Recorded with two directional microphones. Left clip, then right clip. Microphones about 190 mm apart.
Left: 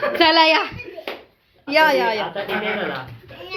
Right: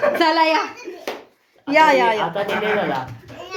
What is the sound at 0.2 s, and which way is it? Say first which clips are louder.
Speech: left 7 dB; 15° left (ahead or behind).